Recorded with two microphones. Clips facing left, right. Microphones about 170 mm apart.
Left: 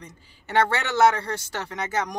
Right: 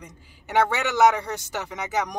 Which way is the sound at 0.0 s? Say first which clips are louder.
Even; 15° right (ahead or behind).